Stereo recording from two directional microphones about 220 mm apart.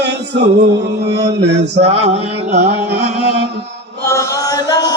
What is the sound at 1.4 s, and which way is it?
Mantra, 50° right (ahead or behind).